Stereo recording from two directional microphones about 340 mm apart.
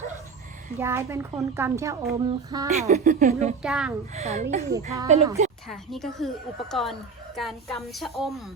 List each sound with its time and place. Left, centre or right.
0.8 s speech: centre; by 3.5 s right
3.6 s a woman's voice: centre
4.1 s a woman's voice: centre
5.6 s a woman's voice: centre